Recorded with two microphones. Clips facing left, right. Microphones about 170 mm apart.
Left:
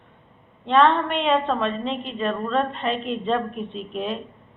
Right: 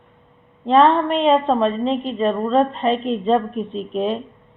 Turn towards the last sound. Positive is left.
turn(degrees=-35)  # may be behind; listen again after turning